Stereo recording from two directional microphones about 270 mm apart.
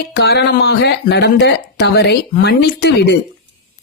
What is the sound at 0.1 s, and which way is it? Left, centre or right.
Speech, left.